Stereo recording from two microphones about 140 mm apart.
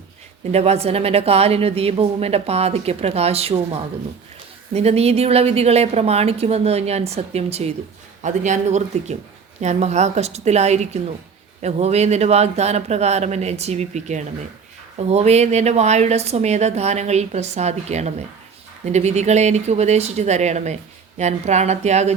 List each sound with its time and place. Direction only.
0.5 s speech: 50° right (ahead or behind)
8.2 s speech: 60° right (ahead or behind)